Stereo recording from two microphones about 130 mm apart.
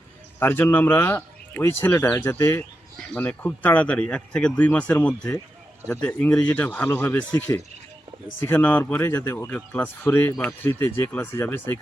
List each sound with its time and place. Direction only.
0.3 s speech: 15° left (ahead or behind)
8.4 s speech: 15° left (ahead or behind)